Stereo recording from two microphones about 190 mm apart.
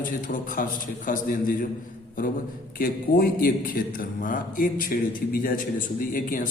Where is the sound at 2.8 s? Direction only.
50° left (ahead or behind).